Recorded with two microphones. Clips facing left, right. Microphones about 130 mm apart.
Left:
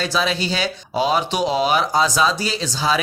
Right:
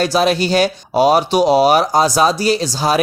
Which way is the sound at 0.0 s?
45° right (ahead or behind).